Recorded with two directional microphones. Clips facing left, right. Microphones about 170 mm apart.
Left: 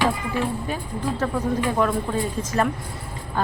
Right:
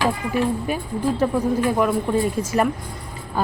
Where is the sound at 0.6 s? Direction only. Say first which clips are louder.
Right 4 dB; 10° right (ahead or behind).